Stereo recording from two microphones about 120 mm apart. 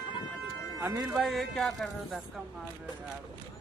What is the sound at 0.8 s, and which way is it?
Speech, 20° right (ahead or behind).